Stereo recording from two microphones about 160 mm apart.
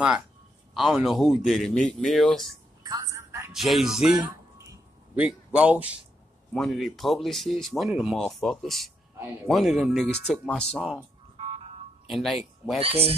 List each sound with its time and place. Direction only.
0.7 s speech: centre (ahead or behind)
2.8 s telephone: 25° right (ahead or behind)
3.5 s speech: centre (ahead or behind)
4.3 s a sound: 10° right (ahead or behind)
6.5 s speech: centre (ahead or behind)
11.3 s car alarm: 40° right (ahead or behind)
12.1 s speech: centre (ahead or behind)
12.8 s speech: 40° right (ahead or behind)